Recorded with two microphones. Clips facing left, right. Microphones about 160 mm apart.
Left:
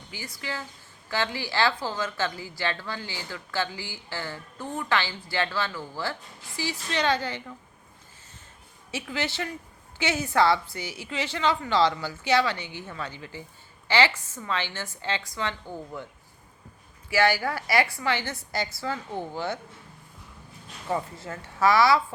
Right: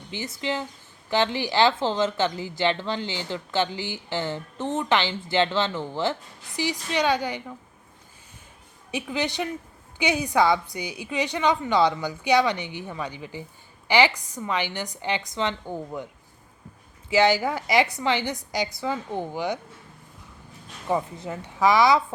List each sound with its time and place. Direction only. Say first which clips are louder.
0.1 s a woman's voice: right 7 dB; 25° right (ahead or behind)
8.9 s a woman's voice: right 4 dB; 15° right (ahead or behind)
17.1 s a woman's voice: right 3 dB; 20° right (ahead or behind)
20.8 s a woman's voice: right 4 dB; 15° right (ahead or behind)